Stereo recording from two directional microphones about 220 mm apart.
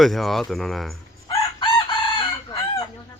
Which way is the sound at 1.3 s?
20° left (ahead or behind).